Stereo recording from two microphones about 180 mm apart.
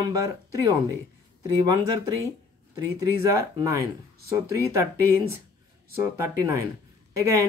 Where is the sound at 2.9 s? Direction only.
15° right (ahead or behind).